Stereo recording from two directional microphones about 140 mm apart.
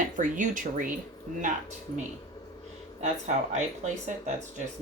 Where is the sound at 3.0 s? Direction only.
55° right (ahead or behind).